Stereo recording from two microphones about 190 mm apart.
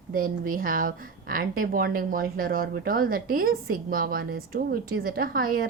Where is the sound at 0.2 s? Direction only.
45° right (ahead or behind).